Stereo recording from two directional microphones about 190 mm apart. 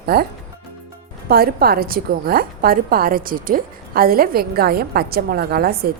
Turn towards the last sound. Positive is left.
turn(degrees=-55)  # may be behind; listen again after turning